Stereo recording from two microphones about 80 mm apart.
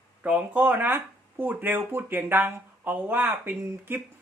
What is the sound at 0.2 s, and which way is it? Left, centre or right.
Speech, centre.